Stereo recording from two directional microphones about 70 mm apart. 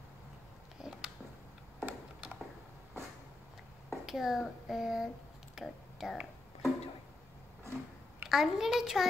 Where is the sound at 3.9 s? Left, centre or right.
Centre.